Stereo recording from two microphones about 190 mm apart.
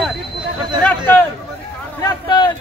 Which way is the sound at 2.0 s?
20° left (ahead or behind).